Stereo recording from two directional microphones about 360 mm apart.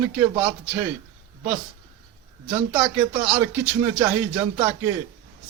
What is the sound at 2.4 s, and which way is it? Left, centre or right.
A man's voice, centre.